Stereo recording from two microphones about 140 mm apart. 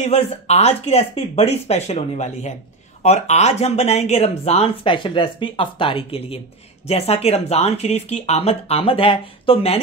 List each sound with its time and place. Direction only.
0.0 s speech: 50° left (ahead or behind)